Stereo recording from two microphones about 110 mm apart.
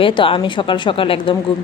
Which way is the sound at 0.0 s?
50° left (ahead or behind).